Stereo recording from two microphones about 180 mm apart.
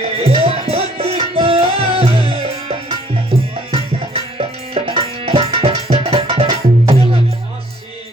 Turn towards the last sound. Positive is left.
turn(degrees=-35)  # may be behind; listen again after turning